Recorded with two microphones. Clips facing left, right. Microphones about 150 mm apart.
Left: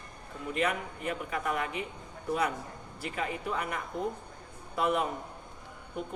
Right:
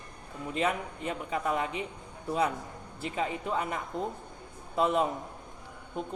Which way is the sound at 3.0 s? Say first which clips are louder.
Right 2 dB; 25° right (ahead or behind).